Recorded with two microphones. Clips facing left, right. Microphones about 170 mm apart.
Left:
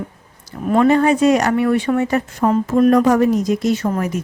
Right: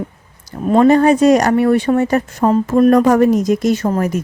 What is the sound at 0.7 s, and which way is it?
Speech, 35° right (ahead or behind).